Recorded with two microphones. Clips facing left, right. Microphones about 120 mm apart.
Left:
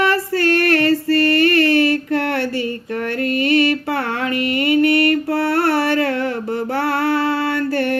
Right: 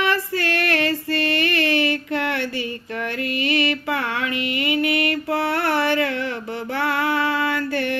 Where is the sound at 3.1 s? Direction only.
45° left (ahead or behind).